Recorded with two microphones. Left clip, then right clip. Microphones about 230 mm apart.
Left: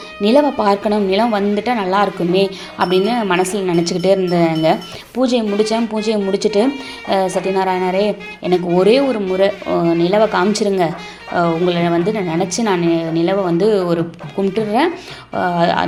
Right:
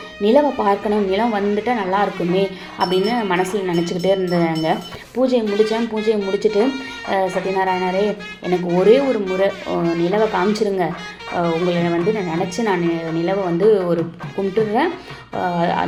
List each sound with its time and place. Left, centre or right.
0.2 s a woman's voice: left